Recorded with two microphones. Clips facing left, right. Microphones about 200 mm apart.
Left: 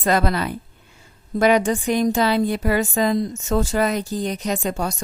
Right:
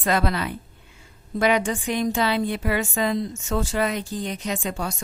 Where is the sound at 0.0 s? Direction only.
40° left (ahead or behind).